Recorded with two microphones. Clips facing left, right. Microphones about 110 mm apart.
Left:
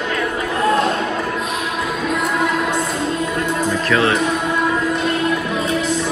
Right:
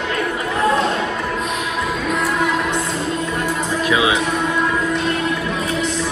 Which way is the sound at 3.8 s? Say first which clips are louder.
Even; 10° right (ahead or behind).